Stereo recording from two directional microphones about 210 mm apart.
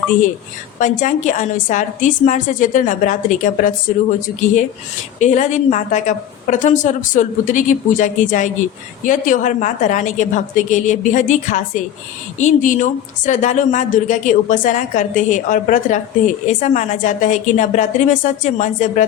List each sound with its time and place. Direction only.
0.8 s a woman's voice: 35° left (ahead or behind)
5.2 s a woman's voice: 35° left (ahead or behind)